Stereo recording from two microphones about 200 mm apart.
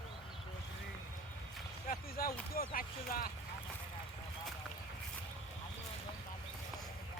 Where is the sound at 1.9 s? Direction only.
45° left (ahead or behind).